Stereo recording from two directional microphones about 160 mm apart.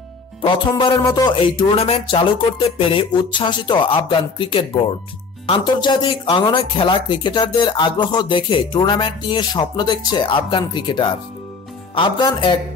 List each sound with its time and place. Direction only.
0.4 s music: 30° left (ahead or behind)
5.5 s speech: 30° left (ahead or behind)
11.9 s music: 30° left (ahead or behind)